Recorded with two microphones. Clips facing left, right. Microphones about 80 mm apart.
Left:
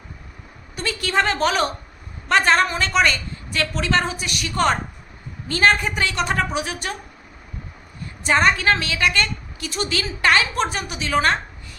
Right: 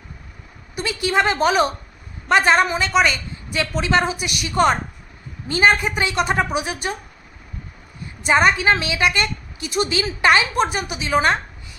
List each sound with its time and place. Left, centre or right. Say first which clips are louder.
0.8 s a woman's voice: right 2 dB; centre
8.3 s a woman's voice: right 2 dB; centre